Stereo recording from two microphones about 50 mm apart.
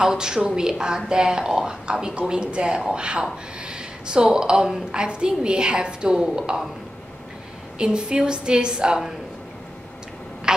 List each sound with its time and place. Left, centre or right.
0.0 s a woman's voice: centre
7.8 s a woman's voice: centre